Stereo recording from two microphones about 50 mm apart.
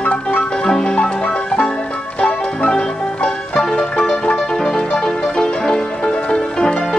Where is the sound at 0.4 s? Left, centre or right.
Centre.